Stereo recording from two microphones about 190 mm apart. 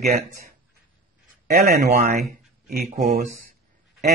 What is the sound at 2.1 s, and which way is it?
Speech, centre (ahead or behind).